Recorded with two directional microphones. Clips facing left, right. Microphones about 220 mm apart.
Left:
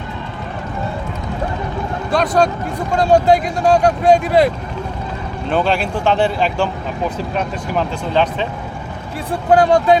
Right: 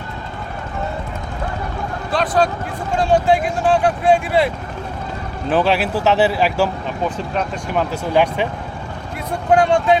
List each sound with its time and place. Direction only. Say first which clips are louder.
2.1 s speech: left 2 dB; 45° left (ahead or behind)
5.5 s speech: right 1 dB; 5° right (ahead or behind)
8.1 s speech: right 1 dB; 10° right (ahead or behind)
9.5 s speech: left 2 dB; 35° left (ahead or behind)